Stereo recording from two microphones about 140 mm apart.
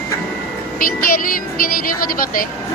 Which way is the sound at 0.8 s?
90° left.